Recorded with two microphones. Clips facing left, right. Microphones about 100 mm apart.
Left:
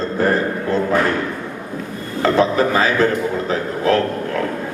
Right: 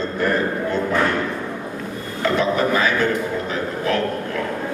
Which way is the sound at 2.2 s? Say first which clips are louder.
Left 4 dB; 35° left (ahead or behind).